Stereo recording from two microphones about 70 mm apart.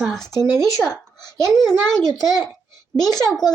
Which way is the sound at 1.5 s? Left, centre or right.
Centre.